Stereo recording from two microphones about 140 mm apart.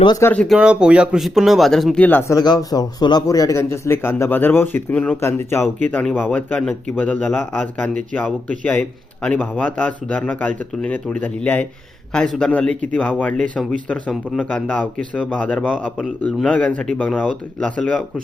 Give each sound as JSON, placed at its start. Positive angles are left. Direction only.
{"t": 0.2, "sound": "a man's voice", "side_deg": 15}
{"t": 0.4, "sound": "speech", "side_deg": -5}
{"t": 2.0, "sound": "a man's voice", "side_deg": 15}